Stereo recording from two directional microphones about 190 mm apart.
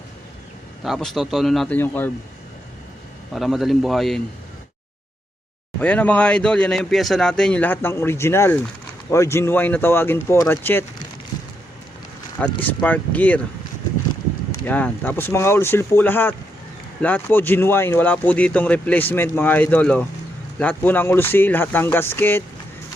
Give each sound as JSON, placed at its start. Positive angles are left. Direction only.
{"t": 0.9, "sound": "speech", "side_deg": 0}
{"t": 3.3, "sound": "speech", "side_deg": 0}
{"t": 5.8, "sound": "speech", "side_deg": 5}
{"t": 12.6, "sound": "speech", "side_deg": 10}
{"t": 14.6, "sound": "speech", "side_deg": 10}